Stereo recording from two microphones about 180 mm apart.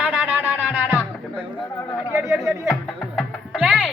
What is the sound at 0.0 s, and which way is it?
Music, 10° right (ahead or behind).